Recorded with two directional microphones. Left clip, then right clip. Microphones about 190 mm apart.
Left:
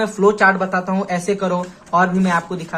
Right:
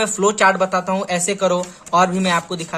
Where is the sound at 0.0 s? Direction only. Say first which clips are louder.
Left 1 dB; 30° right (ahead or behind).